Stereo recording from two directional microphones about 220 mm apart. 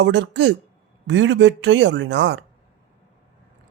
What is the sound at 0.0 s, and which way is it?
Speech, 55° right (ahead or behind).